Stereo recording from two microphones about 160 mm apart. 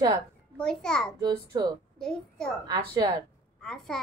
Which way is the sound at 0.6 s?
5° left (ahead or behind).